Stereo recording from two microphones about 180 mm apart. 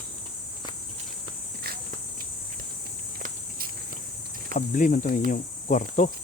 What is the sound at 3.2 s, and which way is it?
Insect, 55° right (ahead or behind).